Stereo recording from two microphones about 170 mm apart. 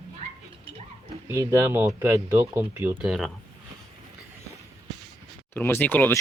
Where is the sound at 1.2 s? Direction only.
15° right (ahead or behind).